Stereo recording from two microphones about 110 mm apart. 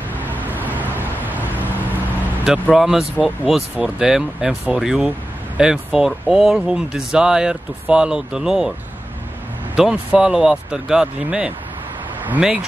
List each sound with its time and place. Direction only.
0.2 s vehicle: 15° right (ahead or behind)
2.7 s speech: 5° right (ahead or behind)
9.8 s speech: 5° right (ahead or behind)